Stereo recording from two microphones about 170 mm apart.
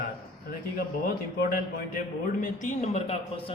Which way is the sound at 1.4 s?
65° left (ahead or behind).